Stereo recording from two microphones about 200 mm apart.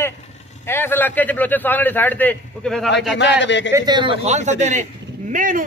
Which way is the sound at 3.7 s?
20° right (ahead or behind).